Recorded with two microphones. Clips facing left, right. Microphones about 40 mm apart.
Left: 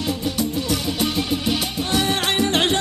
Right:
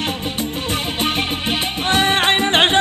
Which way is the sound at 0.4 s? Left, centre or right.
Right.